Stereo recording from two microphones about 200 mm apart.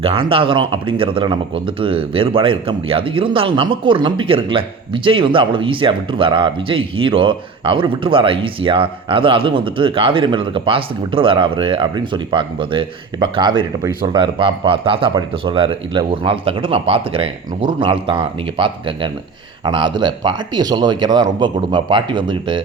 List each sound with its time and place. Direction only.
0.0 s speech: 25° right (ahead or behind)